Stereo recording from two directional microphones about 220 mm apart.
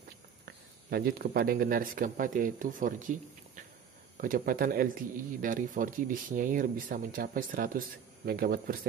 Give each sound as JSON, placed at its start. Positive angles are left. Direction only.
{"t": 0.8, "sound": "a man's voice", "side_deg": -45}